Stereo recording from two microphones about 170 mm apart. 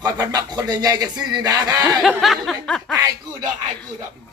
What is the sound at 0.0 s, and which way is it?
Speech, 20° right (ahead or behind).